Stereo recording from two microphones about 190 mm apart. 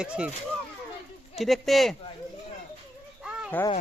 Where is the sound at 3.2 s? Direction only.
5° right (ahead or behind).